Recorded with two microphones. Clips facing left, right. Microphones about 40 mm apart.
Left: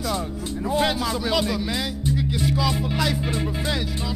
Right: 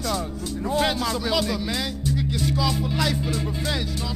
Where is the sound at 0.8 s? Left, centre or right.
Centre.